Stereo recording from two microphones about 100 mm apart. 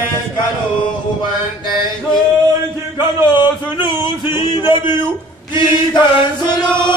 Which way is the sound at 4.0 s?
55° left (ahead or behind).